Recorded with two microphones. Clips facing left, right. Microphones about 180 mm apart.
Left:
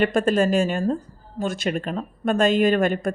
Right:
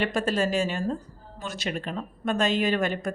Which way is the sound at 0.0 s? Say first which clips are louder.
Left 6 dB; 50° left (ahead or behind).